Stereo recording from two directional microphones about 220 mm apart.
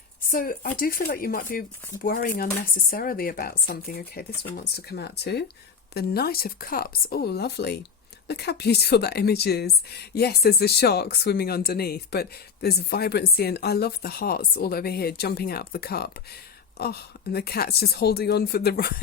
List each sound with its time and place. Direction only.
0.3 s speech: 40° left (ahead or behind)